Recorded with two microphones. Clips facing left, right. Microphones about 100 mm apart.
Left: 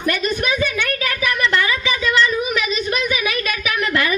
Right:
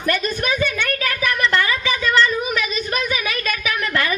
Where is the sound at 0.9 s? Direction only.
35° right (ahead or behind).